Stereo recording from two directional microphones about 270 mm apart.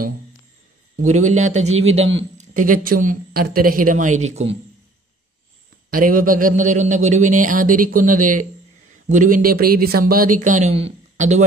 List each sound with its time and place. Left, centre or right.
1.0 s speech: right
5.9 s speech: right